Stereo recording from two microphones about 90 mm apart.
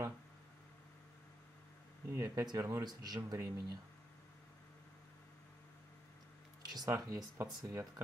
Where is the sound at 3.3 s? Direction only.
35° right (ahead or behind).